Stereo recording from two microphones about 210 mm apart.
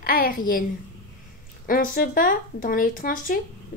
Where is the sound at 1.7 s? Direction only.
40° left (ahead or behind).